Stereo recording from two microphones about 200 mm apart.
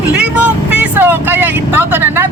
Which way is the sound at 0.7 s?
10° right (ahead or behind).